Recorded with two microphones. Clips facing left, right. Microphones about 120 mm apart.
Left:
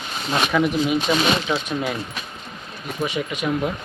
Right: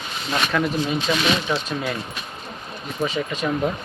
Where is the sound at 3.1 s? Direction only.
10° left (ahead or behind).